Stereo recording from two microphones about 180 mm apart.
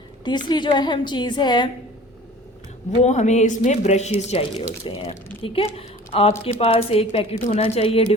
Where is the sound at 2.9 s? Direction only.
40° left (ahead or behind).